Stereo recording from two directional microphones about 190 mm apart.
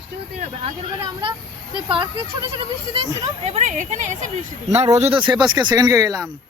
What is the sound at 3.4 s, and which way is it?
Speech, 35° right (ahead or behind).